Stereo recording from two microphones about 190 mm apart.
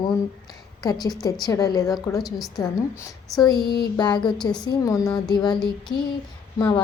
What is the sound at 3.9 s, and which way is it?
A woman's voice, 25° left (ahead or behind).